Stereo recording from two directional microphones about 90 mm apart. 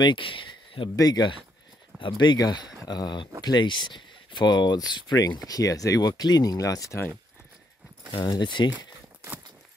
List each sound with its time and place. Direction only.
0.0 s speech: 65° left (ahead or behind)
0.9 s speech: 45° left (ahead or behind)
2.0 s speech: 60° left (ahead or behind); by 7.0 s 40° left (ahead or behind)
8.2 s speech: 60° left (ahead or behind)